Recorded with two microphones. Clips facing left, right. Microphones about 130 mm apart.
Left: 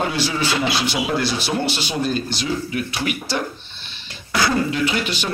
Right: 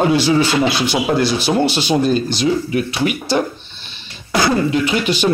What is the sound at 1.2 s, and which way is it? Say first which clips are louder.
Speech: right 6 dB; 20° right (ahead or behind).